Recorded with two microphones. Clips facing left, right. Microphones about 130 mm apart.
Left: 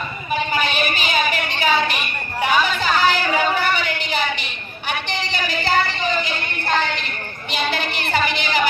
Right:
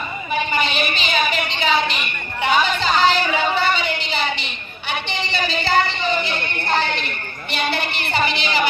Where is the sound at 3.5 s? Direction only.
20° right (ahead or behind).